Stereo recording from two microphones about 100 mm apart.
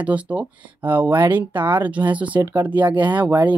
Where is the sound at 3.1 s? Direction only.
15° right (ahead or behind).